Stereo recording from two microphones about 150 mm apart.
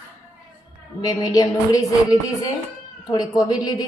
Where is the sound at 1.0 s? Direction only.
25° left (ahead or behind).